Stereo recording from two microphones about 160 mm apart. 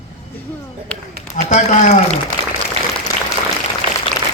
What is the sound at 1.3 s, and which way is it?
Speech, 55° left (ahead or behind).